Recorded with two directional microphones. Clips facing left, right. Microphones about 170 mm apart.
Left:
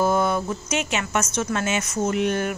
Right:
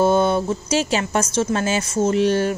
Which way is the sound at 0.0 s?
30° right (ahead or behind).